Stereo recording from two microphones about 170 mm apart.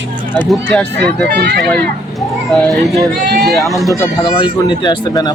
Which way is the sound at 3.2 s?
75° right (ahead or behind).